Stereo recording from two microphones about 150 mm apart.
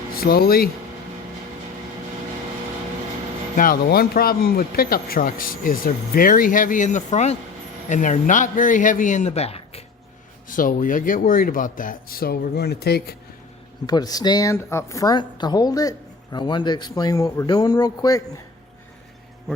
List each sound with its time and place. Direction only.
0.2 s speech: 90° left
3.6 s speech: 80° left; by 9.8 s 40° left (ahead or behind)
10.5 s speech: 65° left (ahead or behind); by 13.1 s 90° left
13.8 s a woman's voice: 25° left (ahead or behind)